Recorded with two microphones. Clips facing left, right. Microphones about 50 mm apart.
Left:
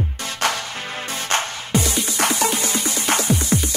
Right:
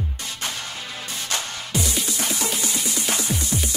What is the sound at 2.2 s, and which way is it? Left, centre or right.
Music, left.